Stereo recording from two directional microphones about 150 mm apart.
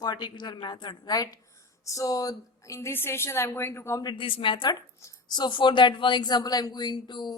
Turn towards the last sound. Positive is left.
turn(degrees=30)  # may be behind; listen again after turning